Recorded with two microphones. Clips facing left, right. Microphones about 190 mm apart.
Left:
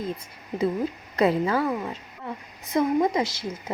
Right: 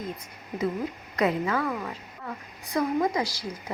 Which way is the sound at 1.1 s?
30° left (ahead or behind).